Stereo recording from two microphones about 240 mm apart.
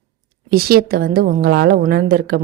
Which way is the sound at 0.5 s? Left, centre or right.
Right.